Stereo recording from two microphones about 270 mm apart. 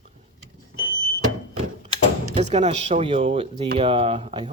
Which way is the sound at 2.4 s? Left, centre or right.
Right.